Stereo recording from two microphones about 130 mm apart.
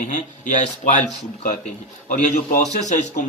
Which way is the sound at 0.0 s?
70° left (ahead or behind).